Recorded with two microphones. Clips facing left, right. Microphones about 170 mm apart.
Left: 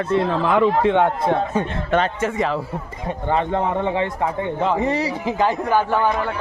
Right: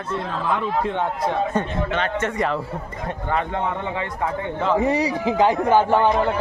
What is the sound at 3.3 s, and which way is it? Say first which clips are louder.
Speech: left 4 dB; 30° left (ahead or behind).